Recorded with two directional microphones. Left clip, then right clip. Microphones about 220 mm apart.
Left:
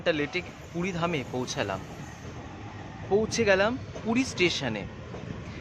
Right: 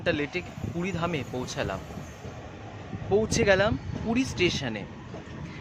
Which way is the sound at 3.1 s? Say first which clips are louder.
Right 1 dB; centre (ahead or behind).